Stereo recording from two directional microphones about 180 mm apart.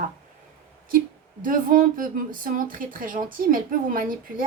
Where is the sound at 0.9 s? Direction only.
50° right (ahead or behind).